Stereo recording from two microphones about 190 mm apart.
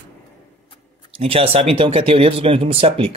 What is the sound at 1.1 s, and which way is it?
Speech, 30° right (ahead or behind).